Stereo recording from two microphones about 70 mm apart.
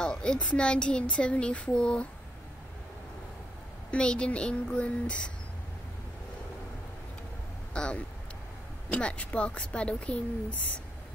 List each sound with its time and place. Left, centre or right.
0.0 s speech: centre
3.9 s speech: centre
7.7 s speech: centre